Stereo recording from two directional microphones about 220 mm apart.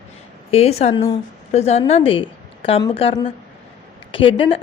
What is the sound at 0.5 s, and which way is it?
A woman's voice, 30° left (ahead or behind).